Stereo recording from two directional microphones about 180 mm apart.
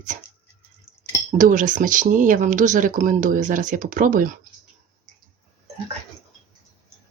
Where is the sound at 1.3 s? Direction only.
45° right (ahead or behind).